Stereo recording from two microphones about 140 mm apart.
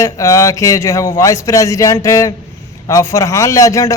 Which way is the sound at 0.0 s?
20° left (ahead or behind).